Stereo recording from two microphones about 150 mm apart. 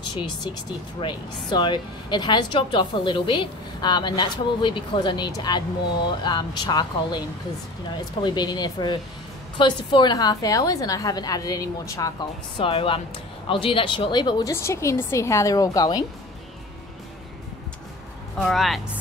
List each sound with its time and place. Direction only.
1.0 s a woman's voice: 30° left (ahead or behind)
12.5 s a woman's voice: 35° left (ahead or behind)
14.5 s a woman's voice: 20° left (ahead or behind)
18.4 s a woman's voice: centre (ahead or behind)